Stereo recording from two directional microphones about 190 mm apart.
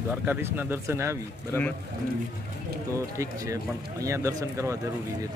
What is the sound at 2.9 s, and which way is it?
Speech, 15° right (ahead or behind).